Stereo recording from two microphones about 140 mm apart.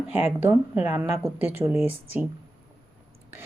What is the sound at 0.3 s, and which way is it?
Speech, 10° right (ahead or behind).